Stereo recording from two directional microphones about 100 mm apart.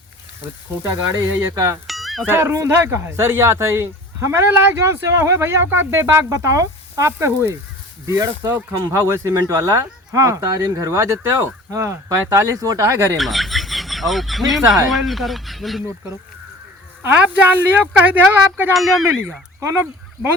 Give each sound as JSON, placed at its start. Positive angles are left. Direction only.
{"t": 1.2, "sound": "speech", "side_deg": -25}
{"t": 1.9, "sound": "music", "side_deg": 0}
{"t": 2.3, "sound": "speech", "side_deg": -30}
{"t": 13.1, "sound": "speech", "side_deg": 0}
{"t": 17.0, "sound": "speech", "side_deg": -15}